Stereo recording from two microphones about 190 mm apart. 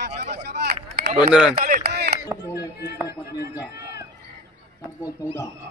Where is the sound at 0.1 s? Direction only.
35° right (ahead or behind).